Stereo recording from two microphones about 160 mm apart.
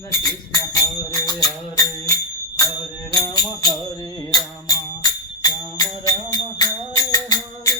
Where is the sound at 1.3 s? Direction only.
20° left (ahead or behind).